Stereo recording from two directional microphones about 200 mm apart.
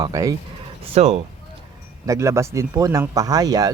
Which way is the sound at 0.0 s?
15° right (ahead or behind).